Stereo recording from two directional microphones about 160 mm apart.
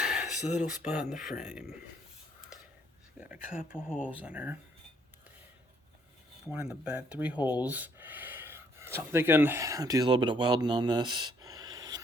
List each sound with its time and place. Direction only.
0.0 s a man's voice: 5° right (ahead or behind)
3.2 s speech: 5° right (ahead or behind)
6.5 s speech: 10° right (ahead or behind); by 11.9 s 25° right (ahead or behind)